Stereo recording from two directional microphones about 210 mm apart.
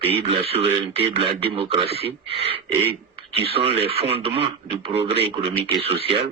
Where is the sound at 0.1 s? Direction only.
25° right (ahead or behind).